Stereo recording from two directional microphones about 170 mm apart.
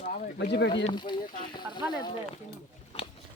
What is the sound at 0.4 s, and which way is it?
Speech, 90° left.